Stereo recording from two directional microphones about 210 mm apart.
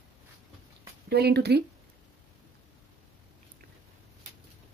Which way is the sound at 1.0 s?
50° right (ahead or behind).